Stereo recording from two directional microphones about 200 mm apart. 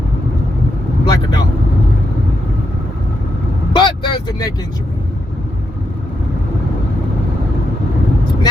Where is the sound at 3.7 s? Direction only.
20° left (ahead or behind).